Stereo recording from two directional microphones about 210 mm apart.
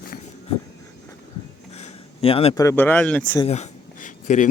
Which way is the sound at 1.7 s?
30° left (ahead or behind).